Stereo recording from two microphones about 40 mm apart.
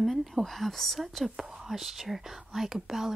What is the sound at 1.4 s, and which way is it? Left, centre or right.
Speech, centre.